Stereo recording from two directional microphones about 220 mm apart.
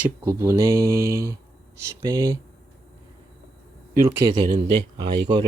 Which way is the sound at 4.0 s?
15° right (ahead or behind).